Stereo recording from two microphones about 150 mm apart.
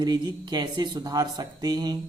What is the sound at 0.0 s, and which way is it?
A man's voice, 25° right (ahead or behind).